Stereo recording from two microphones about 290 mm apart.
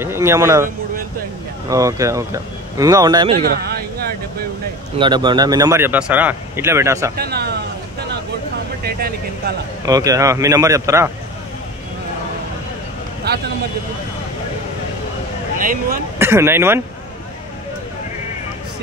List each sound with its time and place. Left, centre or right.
0.0 s speech: centre
1.7 s speech: centre
3.4 s a sound: right
4.9 s speech: centre
7.2 s a sound: right
8.8 s speech: right
9.8 s speech: centre
13.2 s speech: right
15.6 s speech: right
16.2 s speech: centre